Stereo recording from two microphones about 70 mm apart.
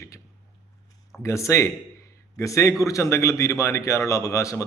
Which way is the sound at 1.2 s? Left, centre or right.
Left.